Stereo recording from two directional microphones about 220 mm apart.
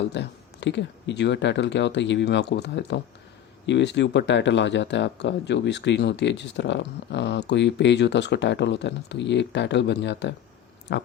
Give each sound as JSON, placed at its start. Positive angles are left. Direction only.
{"t": 0.1, "sound": "speech", "side_deg": 55}